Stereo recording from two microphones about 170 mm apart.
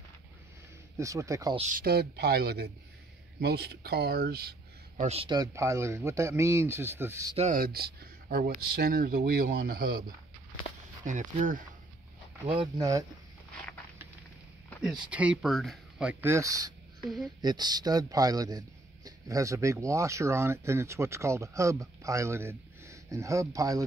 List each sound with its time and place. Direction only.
0.9 s speech: 20° right (ahead or behind)
1.6 s speech: 55° right (ahead or behind)
5.0 s speech: 35° right (ahead or behind); by 7.3 s 15° right (ahead or behind)
7.3 s speech: 50° right (ahead or behind)
11.1 s speech: 45° right (ahead or behind)
12.5 s speech: 20° right (ahead or behind)
14.8 s speech: 5° right (ahead or behind); by 16.7 s 20° right (ahead or behind)
17.0 s speech: centre (ahead or behind)
17.4 s speech: 25° right (ahead or behind)